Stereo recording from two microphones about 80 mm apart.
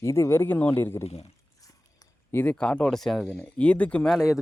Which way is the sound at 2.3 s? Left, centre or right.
Left.